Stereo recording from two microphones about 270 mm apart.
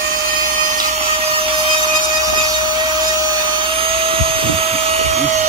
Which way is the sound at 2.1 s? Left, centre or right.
Centre.